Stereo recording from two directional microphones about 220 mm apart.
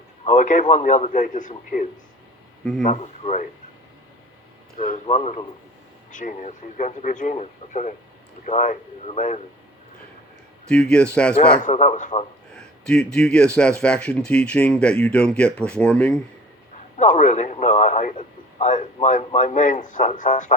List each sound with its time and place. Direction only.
0.3 s a man's voice: 35° left (ahead or behind)
4.8 s a man's voice: 30° left (ahead or behind)
10.7 s speech: 5° left (ahead or behind)
11.6 s a man's voice: 30° left (ahead or behind)
12.8 s speech: 5° left (ahead or behind)
17.0 s a man's voice: 35° left (ahead or behind)